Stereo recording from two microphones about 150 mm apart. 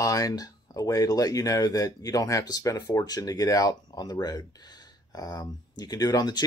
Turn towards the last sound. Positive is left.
turn(degrees=25)  # may be behind; listen again after turning